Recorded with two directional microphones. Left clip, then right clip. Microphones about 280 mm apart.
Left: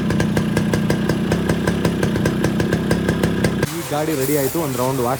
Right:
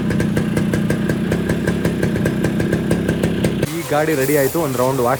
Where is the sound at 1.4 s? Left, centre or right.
Left.